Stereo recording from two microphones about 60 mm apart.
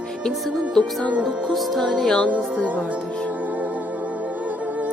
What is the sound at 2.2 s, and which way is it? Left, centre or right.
Speech, right.